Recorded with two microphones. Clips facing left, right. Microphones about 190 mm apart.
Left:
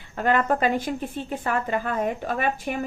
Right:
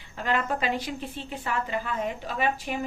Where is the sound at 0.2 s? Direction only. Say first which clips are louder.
Left 6 dB; 50° left (ahead or behind).